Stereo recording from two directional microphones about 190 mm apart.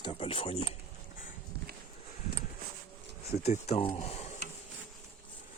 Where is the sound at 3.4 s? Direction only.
35° left (ahead or behind).